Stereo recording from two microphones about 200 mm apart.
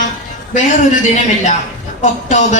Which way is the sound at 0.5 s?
40° left (ahead or behind).